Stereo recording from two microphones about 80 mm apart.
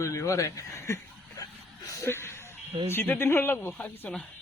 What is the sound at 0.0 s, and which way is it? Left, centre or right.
Speech, left.